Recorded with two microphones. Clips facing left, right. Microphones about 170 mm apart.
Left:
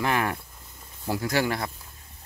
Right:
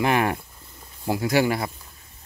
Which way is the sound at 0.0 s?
15° right (ahead or behind).